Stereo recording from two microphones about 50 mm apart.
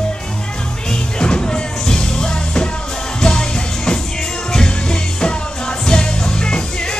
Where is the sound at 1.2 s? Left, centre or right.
Centre.